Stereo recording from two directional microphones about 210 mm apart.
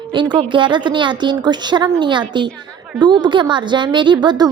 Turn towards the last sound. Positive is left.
turn(degrees=-20)  # may be behind; listen again after turning